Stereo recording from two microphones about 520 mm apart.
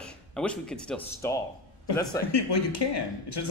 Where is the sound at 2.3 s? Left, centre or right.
Left.